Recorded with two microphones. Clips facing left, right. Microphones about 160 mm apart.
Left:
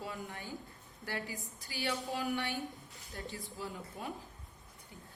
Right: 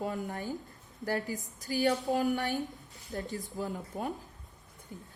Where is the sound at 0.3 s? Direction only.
40° right (ahead or behind).